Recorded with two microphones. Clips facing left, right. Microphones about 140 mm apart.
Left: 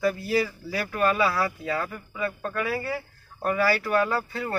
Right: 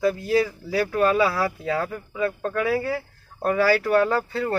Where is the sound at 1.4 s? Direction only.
5° right (ahead or behind).